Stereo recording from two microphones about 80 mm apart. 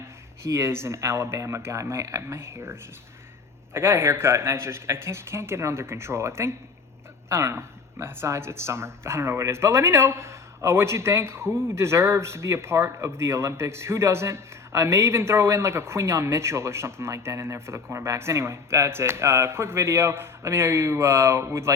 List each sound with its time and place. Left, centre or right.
0.4 s speech: right
3.8 s speech: right